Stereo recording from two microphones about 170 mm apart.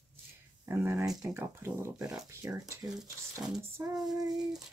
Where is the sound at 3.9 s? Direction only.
Centre (ahead or behind).